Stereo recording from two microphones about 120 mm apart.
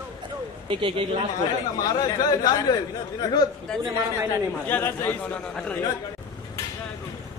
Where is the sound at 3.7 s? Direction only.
5° left (ahead or behind).